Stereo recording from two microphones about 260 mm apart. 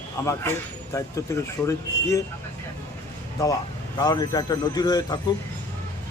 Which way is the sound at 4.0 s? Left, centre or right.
Centre.